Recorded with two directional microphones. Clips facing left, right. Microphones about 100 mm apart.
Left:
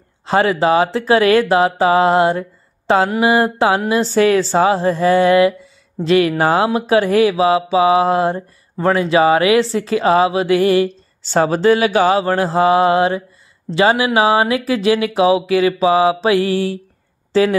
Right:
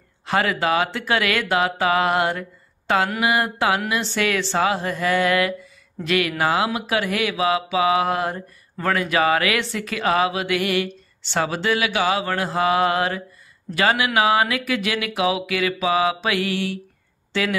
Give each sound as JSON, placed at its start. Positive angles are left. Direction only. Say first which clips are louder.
{"t": 0.2, "sound": "speech", "louder": "left 7 dB", "side_deg": 30}